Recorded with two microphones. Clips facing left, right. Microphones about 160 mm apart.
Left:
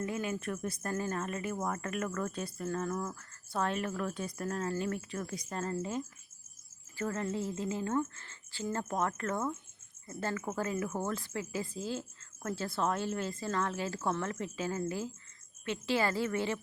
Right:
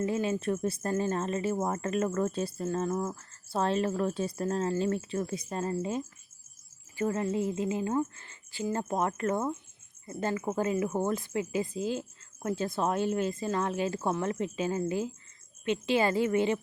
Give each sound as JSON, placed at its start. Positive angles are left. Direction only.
{"t": 0.0, "sound": "speech", "side_deg": -25}
{"t": 5.5, "sound": "speech", "side_deg": -15}